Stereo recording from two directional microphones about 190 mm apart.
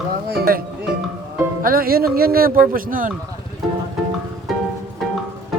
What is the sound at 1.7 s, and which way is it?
A man's voice, 50° right (ahead or behind).